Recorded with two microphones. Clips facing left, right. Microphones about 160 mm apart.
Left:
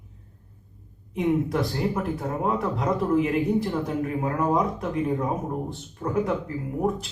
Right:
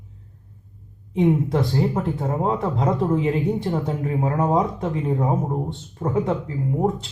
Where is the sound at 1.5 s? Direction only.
25° right (ahead or behind).